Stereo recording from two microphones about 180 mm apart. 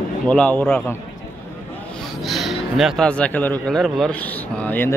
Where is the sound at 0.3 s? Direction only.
5° left (ahead or behind).